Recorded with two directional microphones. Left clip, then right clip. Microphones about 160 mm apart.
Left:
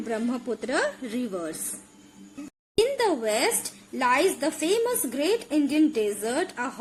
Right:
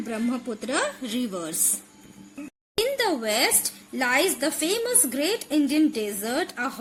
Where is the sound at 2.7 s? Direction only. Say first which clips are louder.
Left 1 dB; 70° right (ahead or behind).